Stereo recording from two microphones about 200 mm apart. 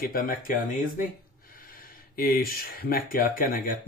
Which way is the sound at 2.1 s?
50° left (ahead or behind).